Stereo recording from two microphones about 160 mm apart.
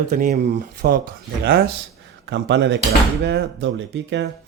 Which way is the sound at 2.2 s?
90° right.